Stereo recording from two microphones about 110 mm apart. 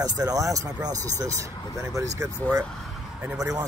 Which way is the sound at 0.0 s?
35° right (ahead or behind).